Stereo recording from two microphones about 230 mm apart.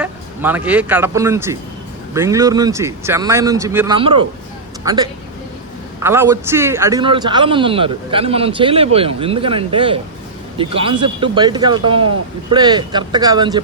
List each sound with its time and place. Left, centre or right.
0.0 s speech: centre
6.0 s a man's voice: centre